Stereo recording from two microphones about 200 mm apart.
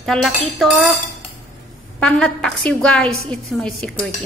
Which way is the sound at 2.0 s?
5° left (ahead or behind).